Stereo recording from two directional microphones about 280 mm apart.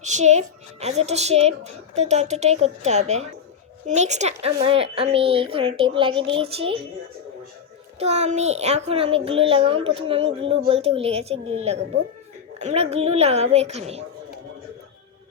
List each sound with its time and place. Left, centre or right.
0.0 s speech: right
7.9 s speech: right